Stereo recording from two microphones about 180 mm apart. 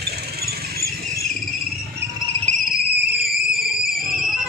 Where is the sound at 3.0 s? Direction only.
60° right (ahead or behind).